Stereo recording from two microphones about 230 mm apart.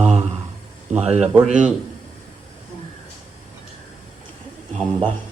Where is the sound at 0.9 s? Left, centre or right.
Right.